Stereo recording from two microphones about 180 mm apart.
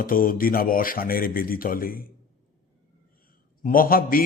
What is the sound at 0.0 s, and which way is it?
A man's voice, 50° left (ahead or behind).